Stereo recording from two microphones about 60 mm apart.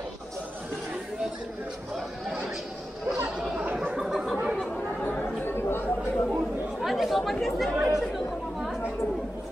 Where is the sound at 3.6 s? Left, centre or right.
Centre.